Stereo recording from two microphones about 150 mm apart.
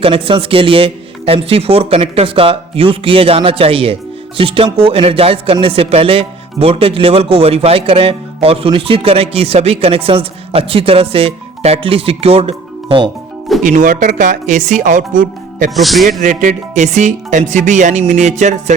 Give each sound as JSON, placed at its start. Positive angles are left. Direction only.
{"t": 0.0, "sound": "speech", "side_deg": -35}
{"t": 13.7, "sound": "speech", "side_deg": -60}
{"t": 15.7, "sound": "a man's voice", "side_deg": 0}
{"t": 16.2, "sound": "speech", "side_deg": -55}